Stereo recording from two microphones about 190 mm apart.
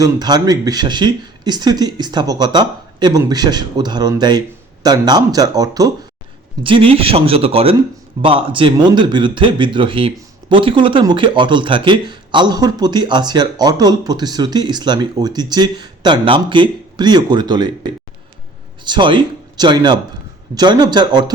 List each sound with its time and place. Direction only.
0.0 s a man's voice: 20° right (ahead or behind)